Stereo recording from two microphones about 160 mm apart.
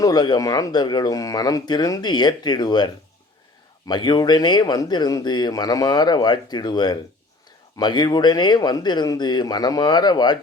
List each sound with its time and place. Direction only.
0.0 s speech: 25° left (ahead or behind)